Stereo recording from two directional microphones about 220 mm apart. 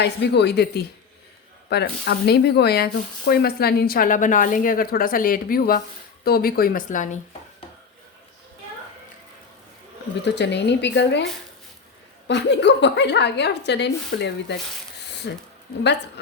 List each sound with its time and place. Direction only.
0.0 s speech: 50° left (ahead or behind)
10.2 s speech: 50° left (ahead or behind)
12.3 s speech: 55° left (ahead or behind)